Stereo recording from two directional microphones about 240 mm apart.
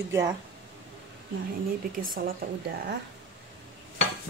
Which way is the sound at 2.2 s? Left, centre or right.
Right.